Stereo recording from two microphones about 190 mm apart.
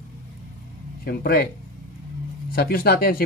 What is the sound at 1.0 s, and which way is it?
Speech, 55° left (ahead or behind).